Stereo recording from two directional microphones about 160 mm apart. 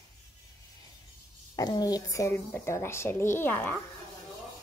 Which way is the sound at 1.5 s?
25° left (ahead or behind).